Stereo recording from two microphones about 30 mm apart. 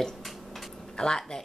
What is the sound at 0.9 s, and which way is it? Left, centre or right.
Speech, left.